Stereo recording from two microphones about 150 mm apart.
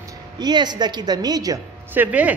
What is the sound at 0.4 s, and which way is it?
A woman's voice, 30° right (ahead or behind).